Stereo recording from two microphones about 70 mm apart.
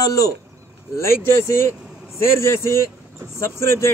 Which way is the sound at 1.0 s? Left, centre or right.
Left.